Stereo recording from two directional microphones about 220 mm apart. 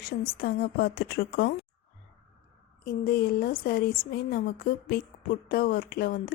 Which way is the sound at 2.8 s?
45° left (ahead or behind).